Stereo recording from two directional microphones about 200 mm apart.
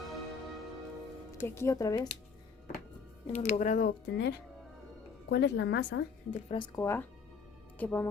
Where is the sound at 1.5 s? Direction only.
15° left (ahead or behind).